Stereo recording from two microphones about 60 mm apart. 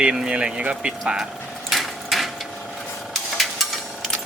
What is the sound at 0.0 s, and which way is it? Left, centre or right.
Speech, centre.